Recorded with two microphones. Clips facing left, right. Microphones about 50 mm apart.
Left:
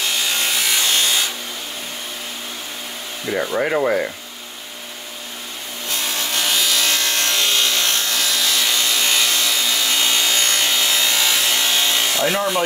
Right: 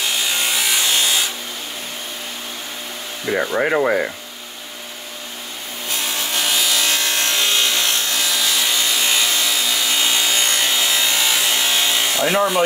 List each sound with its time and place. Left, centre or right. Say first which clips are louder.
0.0 s wood: even; centre
3.5 s speech: right 1 dB; centre
5.9 s wood: even; centre